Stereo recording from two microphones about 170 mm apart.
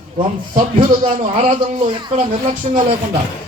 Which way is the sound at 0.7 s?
40° right (ahead or behind).